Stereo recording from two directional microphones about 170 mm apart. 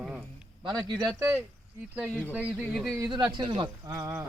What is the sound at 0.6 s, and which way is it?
Speech, 20° right (ahead or behind).